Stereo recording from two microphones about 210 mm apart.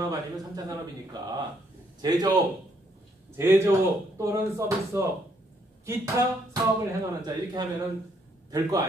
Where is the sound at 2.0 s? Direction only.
20° right (ahead or behind).